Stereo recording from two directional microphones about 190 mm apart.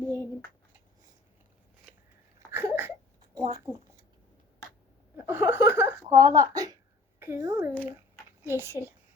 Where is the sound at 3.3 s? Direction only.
20° right (ahead or behind).